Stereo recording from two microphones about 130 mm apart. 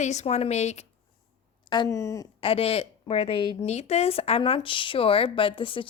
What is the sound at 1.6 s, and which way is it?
Speech, 35° left (ahead or behind).